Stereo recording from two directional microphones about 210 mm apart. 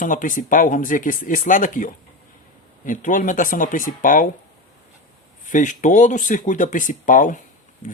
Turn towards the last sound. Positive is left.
turn(degrees=40)  # may be behind; listen again after turning